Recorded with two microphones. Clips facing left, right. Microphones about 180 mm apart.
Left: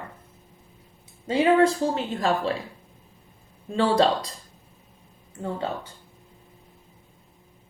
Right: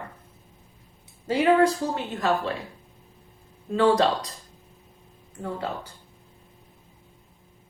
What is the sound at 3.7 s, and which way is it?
Speech, 30° left (ahead or behind).